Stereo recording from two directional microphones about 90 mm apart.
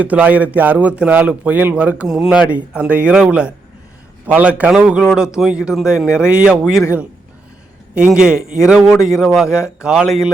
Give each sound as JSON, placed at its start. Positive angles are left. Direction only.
{"t": 0.0, "sound": "a man's voice", "side_deg": -15}
{"t": 7.9, "sound": "a man's voice", "side_deg": -10}